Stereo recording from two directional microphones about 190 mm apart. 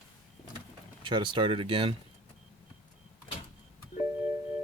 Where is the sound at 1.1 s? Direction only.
25° right (ahead or behind).